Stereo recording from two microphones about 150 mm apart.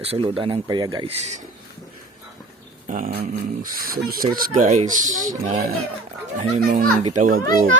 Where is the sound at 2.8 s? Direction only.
65° right (ahead or behind).